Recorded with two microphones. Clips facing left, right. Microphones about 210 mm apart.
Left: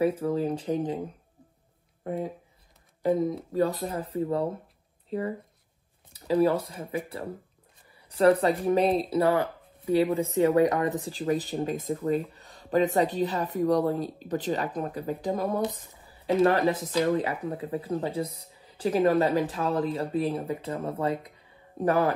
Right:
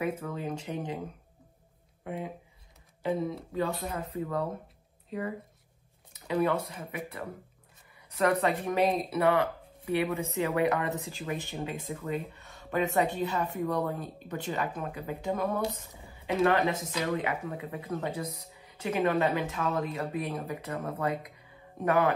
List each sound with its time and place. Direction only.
0.0 s speech: 30° left (ahead or behind)
2.0 s speech: 40° left (ahead or behind)